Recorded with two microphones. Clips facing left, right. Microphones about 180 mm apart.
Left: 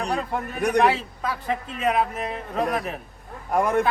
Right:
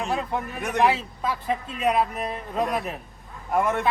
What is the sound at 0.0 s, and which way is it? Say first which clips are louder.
A man's voice: left 1 dB; centre (ahead or behind).